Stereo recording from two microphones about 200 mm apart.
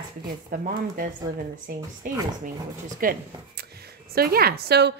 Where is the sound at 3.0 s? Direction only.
45° right (ahead or behind).